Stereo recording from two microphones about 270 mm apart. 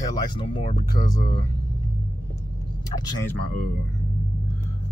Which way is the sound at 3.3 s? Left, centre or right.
Right.